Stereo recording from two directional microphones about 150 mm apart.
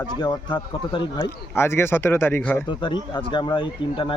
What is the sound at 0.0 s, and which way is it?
Speech, 30° left (ahead or behind).